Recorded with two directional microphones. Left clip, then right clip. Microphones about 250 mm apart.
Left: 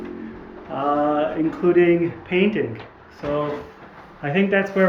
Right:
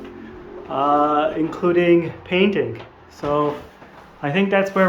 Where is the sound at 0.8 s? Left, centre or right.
Centre.